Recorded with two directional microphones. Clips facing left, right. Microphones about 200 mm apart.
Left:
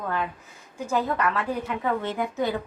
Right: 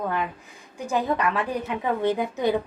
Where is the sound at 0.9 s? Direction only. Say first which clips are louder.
Right 1 dB; 15° right (ahead or behind).